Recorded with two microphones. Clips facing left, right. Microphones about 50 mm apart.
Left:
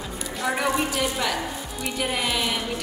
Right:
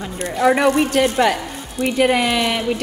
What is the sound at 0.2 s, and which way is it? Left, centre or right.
A woman's voice, right.